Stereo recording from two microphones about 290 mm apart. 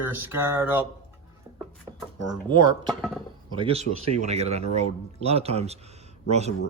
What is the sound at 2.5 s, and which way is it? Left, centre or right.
Speech, centre.